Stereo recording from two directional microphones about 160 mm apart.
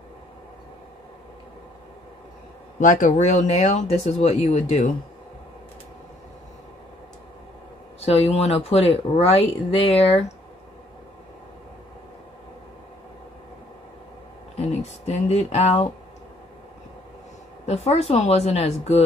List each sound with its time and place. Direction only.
2.8 s speech: 50° left (ahead or behind)
8.0 s speech: 40° left (ahead or behind)
14.8 s speech: 40° left (ahead or behind)
17.6 s speech: 40° left (ahead or behind)